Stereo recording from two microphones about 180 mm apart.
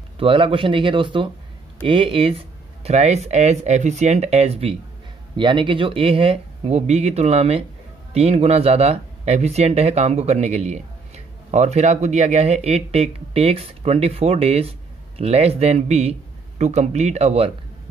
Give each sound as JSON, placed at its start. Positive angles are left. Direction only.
{"t": 0.2, "sound": "speech", "side_deg": -30}